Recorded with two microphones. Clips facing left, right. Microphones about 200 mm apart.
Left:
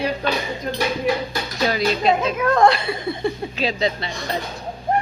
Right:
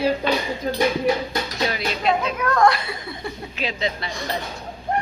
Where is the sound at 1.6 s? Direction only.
35° left (ahead or behind).